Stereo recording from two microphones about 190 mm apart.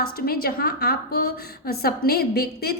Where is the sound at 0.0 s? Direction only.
55° left (ahead or behind).